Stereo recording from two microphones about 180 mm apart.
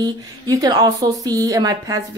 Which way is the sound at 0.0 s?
20° right (ahead or behind).